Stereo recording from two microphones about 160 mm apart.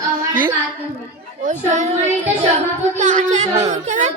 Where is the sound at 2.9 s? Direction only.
45° right (ahead or behind).